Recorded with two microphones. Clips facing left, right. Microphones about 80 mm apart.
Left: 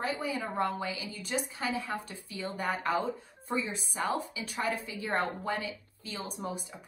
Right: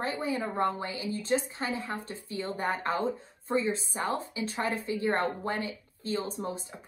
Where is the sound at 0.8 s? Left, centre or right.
Right.